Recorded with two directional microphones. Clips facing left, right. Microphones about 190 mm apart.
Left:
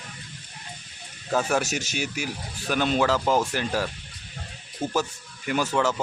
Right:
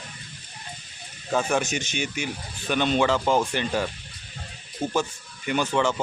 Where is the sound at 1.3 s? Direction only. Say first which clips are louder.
Even; 5° left (ahead or behind).